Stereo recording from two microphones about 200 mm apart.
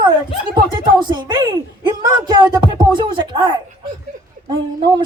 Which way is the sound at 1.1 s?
20° right (ahead or behind).